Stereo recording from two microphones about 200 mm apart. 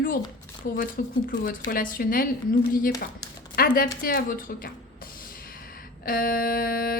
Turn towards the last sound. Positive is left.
turn(degrees=45)  # may be behind; listen again after turning